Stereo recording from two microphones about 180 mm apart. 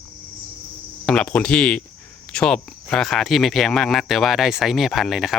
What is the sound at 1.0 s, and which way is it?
Speech, 5° left (ahead or behind).